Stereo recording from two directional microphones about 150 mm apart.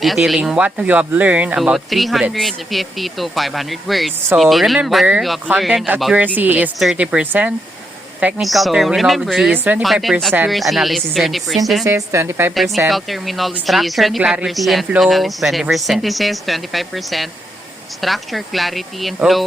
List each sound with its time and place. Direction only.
0.0 s a woman's voice: centre (ahead or behind)
11.9 s speech: 20° right (ahead or behind)
12.5 s a woman's voice: centre (ahead or behind)